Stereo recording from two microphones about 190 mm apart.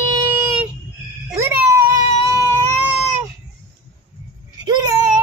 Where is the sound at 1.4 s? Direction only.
15° right (ahead or behind).